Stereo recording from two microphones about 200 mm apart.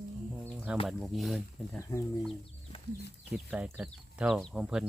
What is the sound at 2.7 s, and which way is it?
Chicken, 25° left (ahead or behind).